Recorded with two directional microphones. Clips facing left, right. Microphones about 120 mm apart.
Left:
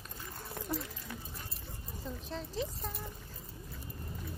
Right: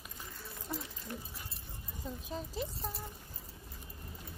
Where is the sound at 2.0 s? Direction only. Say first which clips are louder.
Even; 10° right (ahead or behind).